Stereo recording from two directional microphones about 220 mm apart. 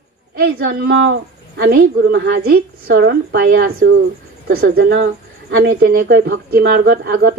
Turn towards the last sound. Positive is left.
turn(degrees=-45)  # may be behind; listen again after turning